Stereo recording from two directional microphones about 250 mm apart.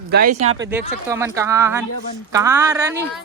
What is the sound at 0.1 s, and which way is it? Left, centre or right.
Speech, right.